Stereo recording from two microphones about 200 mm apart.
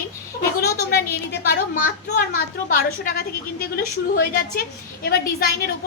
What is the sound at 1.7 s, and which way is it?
A woman's voice, 40° left (ahead or behind).